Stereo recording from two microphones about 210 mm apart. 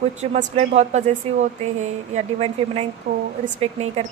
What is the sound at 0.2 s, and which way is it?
A woman's voice, 35° right (ahead or behind).